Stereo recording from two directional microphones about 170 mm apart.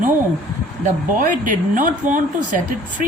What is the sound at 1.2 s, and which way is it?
A woman's voice, 50° right (ahead or behind).